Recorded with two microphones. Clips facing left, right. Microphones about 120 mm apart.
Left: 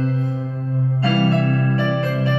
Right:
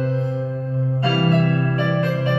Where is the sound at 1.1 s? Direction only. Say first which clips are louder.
Even; 30° right (ahead or behind).